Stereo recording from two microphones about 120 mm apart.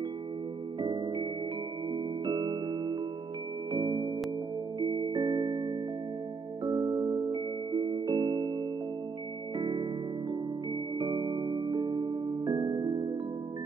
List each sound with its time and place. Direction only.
0.7 s music: 40° right (ahead or behind)
2.2 s music: 35° right (ahead or behind)
9.6 s music: 40° right (ahead or behind)